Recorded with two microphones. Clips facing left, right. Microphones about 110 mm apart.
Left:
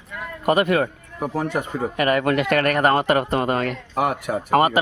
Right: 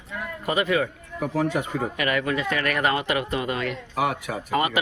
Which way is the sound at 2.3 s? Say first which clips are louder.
Left 6 dB; 65° left (ahead or behind).